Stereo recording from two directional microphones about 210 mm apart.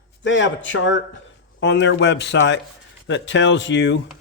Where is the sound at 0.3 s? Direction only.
60° left (ahead or behind).